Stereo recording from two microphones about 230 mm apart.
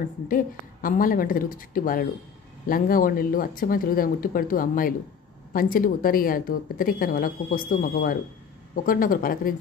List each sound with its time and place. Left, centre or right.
0.8 s a woman's voice: left